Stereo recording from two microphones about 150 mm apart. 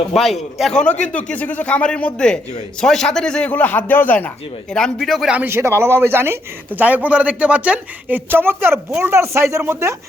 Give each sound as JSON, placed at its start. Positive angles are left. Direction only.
{"t": 0.1, "sound": "a man's voice", "side_deg": 0}